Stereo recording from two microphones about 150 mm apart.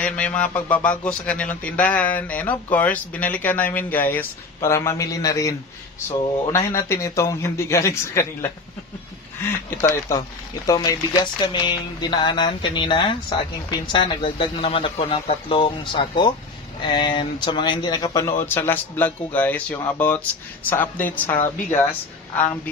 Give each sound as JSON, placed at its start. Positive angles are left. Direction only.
{"t": 0.0, "sound": "speech", "side_deg": 10}